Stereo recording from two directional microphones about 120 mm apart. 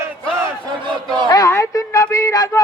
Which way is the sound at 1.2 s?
30° left (ahead or behind).